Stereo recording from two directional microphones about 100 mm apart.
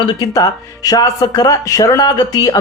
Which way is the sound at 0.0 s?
45° left (ahead or behind).